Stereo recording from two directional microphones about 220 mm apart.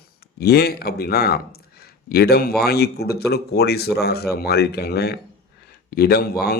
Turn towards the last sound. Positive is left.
turn(degrees=45)  # may be behind; listen again after turning